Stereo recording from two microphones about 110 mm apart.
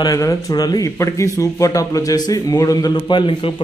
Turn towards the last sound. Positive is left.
turn(degrees=50)  # may be behind; listen again after turning